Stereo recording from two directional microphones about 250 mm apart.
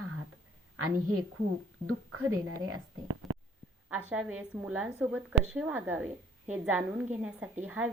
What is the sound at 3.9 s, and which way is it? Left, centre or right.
A woman's voice, centre.